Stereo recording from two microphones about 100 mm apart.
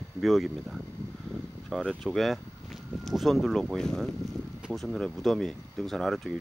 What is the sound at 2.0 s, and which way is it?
Speech, centre (ahead or behind).